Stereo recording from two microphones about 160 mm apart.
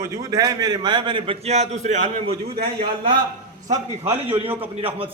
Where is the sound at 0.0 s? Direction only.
20° right (ahead or behind); by 2.3 s 45° right (ahead or behind).